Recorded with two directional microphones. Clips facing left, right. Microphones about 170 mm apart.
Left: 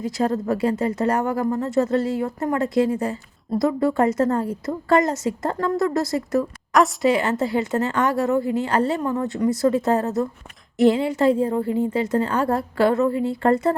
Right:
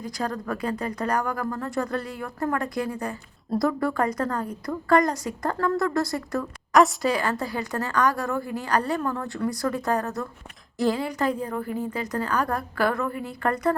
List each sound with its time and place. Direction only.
0.0 s speech: 25° left (ahead or behind)